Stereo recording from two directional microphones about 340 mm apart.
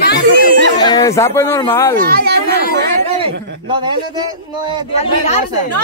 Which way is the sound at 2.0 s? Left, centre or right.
Right.